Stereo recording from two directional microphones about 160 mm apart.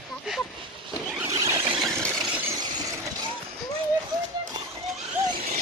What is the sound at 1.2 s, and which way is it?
Squeal, 20° right (ahead or behind).